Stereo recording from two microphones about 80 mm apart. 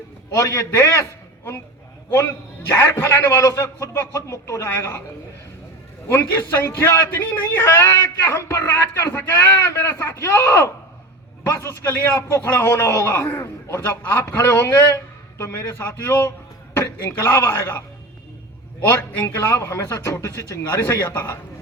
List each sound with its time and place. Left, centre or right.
0.3 s a man's voice: left
2.1 s a man's voice: left
6.1 s a man's voice: left
8.6 s speech: left
9.0 s a man's voice: left
14.3 s a man's voice: left
18.9 s a man's voice: left